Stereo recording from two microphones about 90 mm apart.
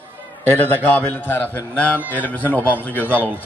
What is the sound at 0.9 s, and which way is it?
A man's voice, 20° left (ahead or behind).